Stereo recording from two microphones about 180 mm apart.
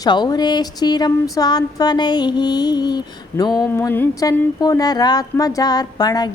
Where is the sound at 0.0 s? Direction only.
20° left (ahead or behind).